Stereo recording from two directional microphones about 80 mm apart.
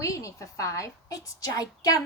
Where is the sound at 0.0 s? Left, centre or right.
Left.